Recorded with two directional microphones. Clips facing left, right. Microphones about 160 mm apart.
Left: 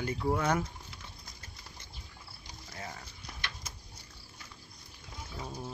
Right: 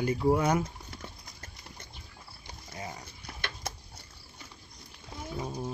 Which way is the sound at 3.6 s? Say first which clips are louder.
Right 9 dB; 65° right (ahead or behind).